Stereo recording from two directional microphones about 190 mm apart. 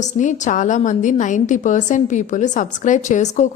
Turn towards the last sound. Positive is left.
turn(degrees=40)  # may be behind; listen again after turning